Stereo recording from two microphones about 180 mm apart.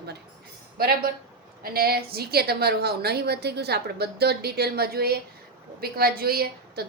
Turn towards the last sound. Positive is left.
turn(degrees=-60)  # may be behind; listen again after turning